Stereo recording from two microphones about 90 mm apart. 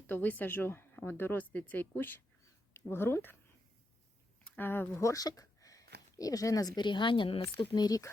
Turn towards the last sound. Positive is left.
turn(degrees=50)  # may be behind; listen again after turning